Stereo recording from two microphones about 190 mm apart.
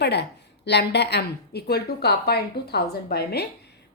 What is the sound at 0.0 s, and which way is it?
A woman's voice, 60° left (ahead or behind).